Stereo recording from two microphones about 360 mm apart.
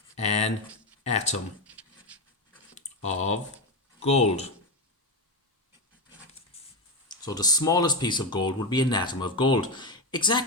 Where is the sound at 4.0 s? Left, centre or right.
Centre.